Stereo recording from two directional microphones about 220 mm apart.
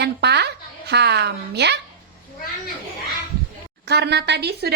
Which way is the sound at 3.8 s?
50° right (ahead or behind).